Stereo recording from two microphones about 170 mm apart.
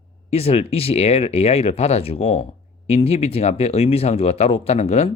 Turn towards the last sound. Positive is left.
turn(degrees=40)  # may be behind; listen again after turning